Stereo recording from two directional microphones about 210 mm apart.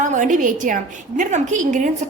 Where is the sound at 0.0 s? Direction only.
35° right (ahead or behind).